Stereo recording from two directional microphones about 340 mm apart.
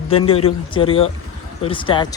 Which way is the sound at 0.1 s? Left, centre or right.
Centre.